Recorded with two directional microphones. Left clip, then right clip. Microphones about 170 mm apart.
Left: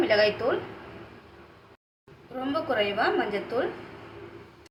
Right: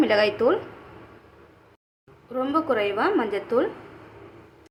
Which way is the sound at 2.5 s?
70° right (ahead or behind).